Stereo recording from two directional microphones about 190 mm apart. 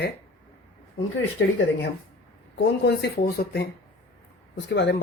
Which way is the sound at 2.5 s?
65° left (ahead or behind).